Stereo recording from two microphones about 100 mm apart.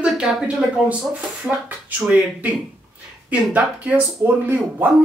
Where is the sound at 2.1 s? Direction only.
15° right (ahead or behind).